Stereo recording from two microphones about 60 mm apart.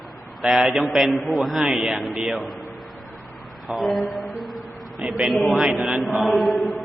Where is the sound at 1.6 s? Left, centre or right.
Centre.